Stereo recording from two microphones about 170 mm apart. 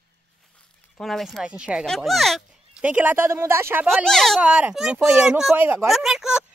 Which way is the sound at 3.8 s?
Centre (ahead or behind).